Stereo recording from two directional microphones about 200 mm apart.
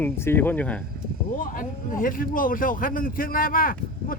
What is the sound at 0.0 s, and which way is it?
Speech, 10° left (ahead or behind).